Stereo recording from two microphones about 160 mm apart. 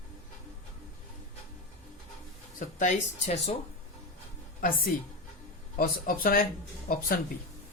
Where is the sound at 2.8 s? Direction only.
45° left (ahead or behind).